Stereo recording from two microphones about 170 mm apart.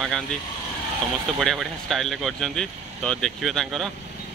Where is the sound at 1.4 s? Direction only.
Centre (ahead or behind).